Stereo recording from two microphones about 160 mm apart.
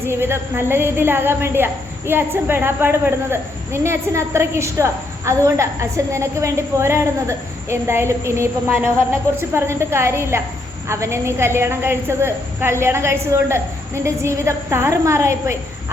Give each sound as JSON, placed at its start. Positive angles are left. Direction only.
{"t": 0.0, "sound": "a woman's voice", "side_deg": -15}